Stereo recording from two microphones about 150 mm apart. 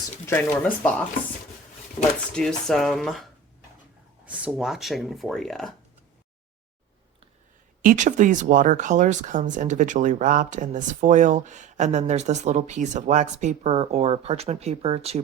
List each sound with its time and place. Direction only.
0.3 s speech: 15° left (ahead or behind)
2.3 s speech: 5° left (ahead or behind)
4.3 s speech: 10° right (ahead or behind)
7.8 s speech: 60° right (ahead or behind); by 15.2 s 40° right (ahead or behind)